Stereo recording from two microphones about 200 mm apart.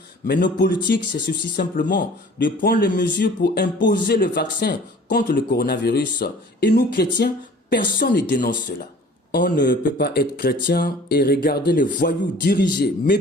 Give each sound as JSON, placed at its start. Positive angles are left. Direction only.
{"t": 0.3, "sound": "speech", "side_deg": 45}
{"t": 0.9, "sound": "speech", "side_deg": 60}
{"t": 1.7, "sound": "speech", "side_deg": 45}
{"t": 4.0, "sound": "speech", "side_deg": 55}